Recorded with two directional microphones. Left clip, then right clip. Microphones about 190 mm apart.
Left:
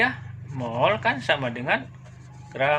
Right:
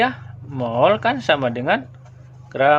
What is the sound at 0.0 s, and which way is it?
Speech, 65° right (ahead or behind).